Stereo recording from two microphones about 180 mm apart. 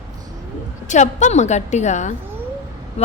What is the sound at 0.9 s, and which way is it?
A woman's voice, 40° left (ahead or behind).